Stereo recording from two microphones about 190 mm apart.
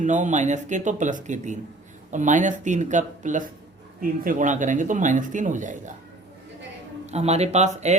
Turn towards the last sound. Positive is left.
turn(degrees=-35)  # may be behind; listen again after turning